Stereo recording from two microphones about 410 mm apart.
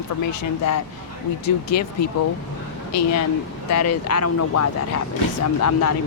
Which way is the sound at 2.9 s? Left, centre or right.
Left.